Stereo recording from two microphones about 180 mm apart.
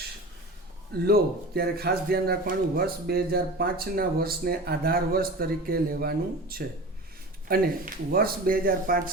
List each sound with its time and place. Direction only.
1.0 s a man's voice: 55° right (ahead or behind)